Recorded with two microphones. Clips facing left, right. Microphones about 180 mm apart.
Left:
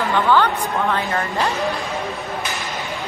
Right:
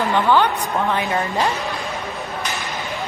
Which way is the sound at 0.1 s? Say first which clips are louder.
Left 1 dB; 15° right (ahead or behind).